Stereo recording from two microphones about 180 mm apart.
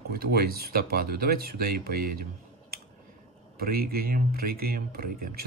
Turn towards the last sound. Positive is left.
turn(degrees=-55)  # may be behind; listen again after turning